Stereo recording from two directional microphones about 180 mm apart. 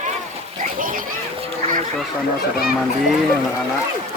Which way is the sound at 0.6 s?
50° right (ahead or behind).